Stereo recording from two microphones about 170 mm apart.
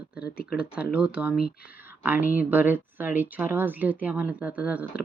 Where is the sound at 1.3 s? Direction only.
65° left (ahead or behind).